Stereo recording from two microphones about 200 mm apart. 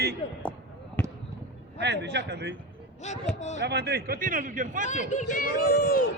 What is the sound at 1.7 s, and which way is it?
Speech, 55° right (ahead or behind).